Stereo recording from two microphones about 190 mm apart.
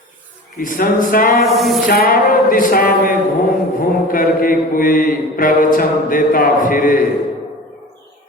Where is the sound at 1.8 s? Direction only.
50° left (ahead or behind).